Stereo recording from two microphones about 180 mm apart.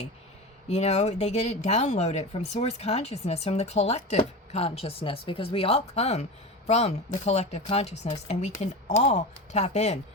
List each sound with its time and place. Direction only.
0.7 s speech: 40° left (ahead or behind)